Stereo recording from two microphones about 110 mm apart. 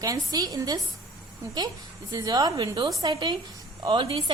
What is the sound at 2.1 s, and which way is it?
A woman's voice, 35° right (ahead or behind).